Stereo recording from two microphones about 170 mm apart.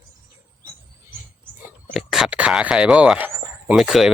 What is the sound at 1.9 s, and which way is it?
Speech, centre (ahead or behind).